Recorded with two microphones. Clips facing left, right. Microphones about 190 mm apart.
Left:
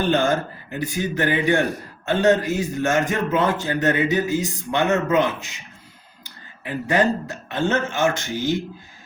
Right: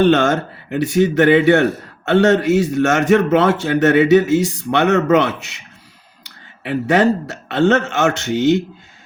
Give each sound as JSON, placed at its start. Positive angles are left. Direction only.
{"t": 0.0, "sound": "a man's voice", "side_deg": -75}